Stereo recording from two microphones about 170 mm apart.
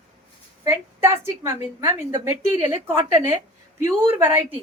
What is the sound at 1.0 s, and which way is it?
A woman's voice, 15° right (ahead or behind).